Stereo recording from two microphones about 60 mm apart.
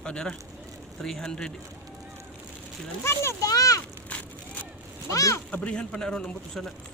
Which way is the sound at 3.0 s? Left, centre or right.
Left.